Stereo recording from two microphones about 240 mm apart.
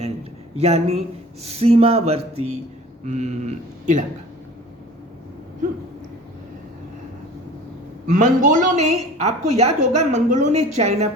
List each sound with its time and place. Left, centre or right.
0.5 s a woman's voice: right
8.1 s a man's voice: right